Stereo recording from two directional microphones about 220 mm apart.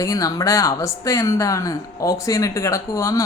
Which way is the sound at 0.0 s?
15° left (ahead or behind).